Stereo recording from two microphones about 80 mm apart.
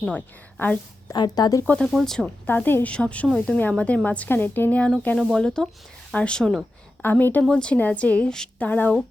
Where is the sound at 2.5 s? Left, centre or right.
Left.